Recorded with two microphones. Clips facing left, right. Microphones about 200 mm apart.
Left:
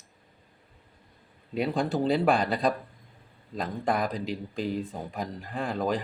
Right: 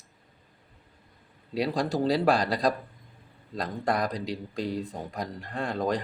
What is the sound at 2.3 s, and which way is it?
Speech, 35° right (ahead or behind).